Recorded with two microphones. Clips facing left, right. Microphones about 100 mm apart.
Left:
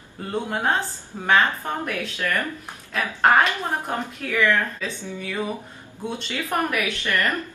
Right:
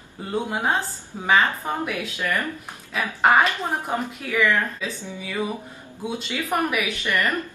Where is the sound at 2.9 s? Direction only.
5° right (ahead or behind).